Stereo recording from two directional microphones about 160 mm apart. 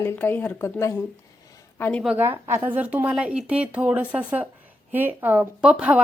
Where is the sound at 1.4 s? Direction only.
20° left (ahead or behind).